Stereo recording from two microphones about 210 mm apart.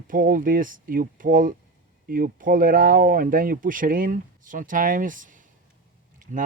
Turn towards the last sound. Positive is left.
turn(degrees=-40)  # may be behind; listen again after turning